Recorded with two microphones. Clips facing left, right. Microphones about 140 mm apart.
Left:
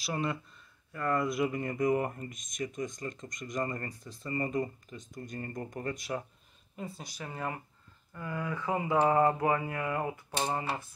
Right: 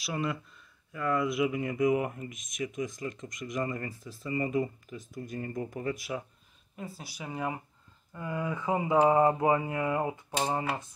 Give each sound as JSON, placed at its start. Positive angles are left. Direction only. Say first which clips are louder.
{"t": 0.0, "sound": "speech", "louder": "right 1 dB", "side_deg": 0}